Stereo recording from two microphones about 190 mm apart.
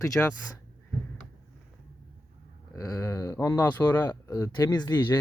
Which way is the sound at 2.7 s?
15° left (ahead or behind).